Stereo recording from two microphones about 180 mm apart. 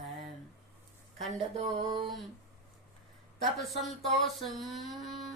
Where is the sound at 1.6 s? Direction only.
25° right (ahead or behind).